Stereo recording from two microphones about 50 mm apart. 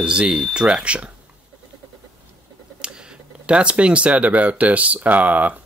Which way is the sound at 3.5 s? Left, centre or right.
Right.